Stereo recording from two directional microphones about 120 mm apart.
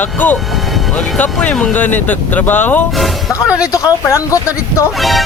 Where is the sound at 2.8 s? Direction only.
Centre (ahead or behind).